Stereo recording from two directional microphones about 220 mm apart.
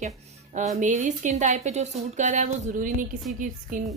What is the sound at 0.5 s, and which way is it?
Speech, 30° right (ahead or behind).